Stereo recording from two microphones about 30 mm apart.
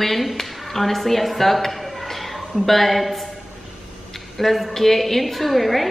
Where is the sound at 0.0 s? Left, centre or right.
Centre.